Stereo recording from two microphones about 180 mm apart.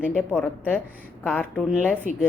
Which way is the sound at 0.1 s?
5° left (ahead or behind).